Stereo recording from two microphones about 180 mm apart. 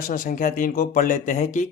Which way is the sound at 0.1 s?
50° left (ahead or behind).